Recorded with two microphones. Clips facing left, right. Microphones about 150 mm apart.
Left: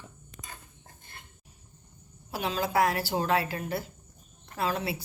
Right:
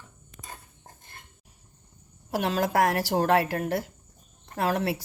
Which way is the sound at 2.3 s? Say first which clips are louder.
Right 3 dB; 80° right.